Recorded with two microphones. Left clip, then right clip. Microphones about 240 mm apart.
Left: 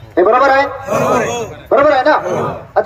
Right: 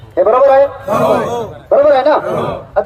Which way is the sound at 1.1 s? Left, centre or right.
Right.